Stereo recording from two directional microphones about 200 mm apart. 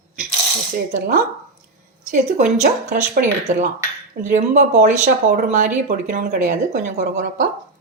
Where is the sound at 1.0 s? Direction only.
50° right (ahead or behind).